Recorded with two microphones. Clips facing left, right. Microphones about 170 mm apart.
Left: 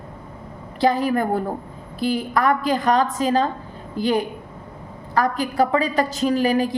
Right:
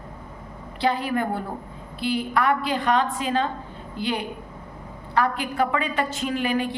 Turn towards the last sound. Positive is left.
turn(degrees=40)  # may be behind; listen again after turning